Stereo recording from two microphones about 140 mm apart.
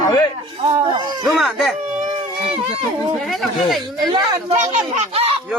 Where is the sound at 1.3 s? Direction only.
Centre (ahead or behind).